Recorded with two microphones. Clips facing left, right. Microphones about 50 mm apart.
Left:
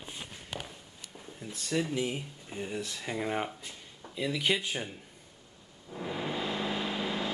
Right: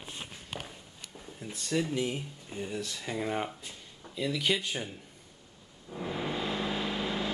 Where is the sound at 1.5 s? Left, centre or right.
Centre.